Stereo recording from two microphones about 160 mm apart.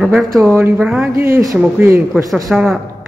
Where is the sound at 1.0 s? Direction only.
15° right (ahead or behind).